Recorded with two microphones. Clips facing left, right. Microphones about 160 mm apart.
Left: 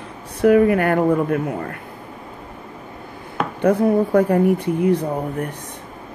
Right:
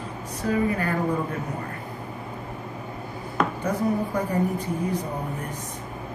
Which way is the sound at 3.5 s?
60° left (ahead or behind).